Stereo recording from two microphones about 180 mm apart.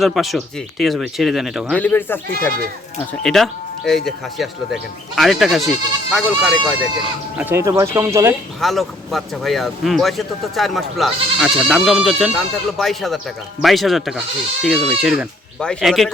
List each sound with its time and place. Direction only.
0.0 s speech: centre (ahead or behind)
1.8 s speech: 10° left (ahead or behind)
3.2 s speech: centre (ahead or behind)
7.3 s speech: 15° right (ahead or behind)
8.6 s speech: centre (ahead or behind)